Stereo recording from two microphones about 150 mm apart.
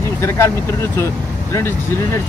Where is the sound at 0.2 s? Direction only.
20° left (ahead or behind).